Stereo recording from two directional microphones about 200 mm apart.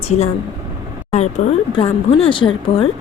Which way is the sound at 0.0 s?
30° left (ahead or behind).